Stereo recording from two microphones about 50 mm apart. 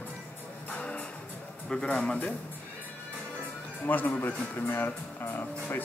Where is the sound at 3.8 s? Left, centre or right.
Left.